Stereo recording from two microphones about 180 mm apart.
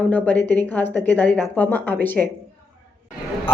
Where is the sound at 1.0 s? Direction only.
10° left (ahead or behind).